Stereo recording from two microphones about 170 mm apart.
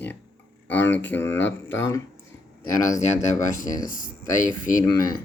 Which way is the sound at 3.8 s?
50° left (ahead or behind).